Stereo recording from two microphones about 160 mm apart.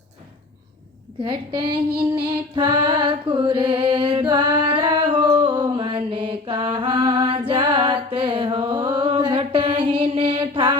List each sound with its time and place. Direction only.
1.2 s a woman's voice: 30° right (ahead or behind)
2.6 s music: 30° right (ahead or behind)